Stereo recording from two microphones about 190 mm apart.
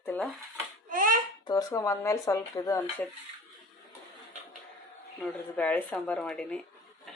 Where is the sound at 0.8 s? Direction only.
45° right (ahead or behind).